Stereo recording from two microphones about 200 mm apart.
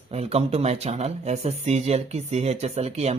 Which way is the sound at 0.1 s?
30° right (ahead or behind).